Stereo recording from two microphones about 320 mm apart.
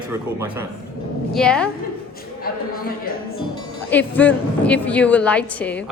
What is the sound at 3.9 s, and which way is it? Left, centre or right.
A woman's voice, centre.